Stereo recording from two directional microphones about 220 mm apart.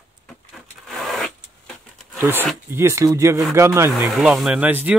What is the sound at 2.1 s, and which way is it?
Speech, 10° right (ahead or behind).